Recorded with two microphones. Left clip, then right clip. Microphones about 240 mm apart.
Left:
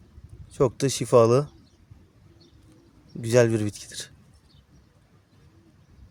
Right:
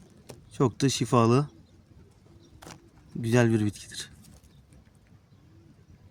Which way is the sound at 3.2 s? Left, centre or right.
Left.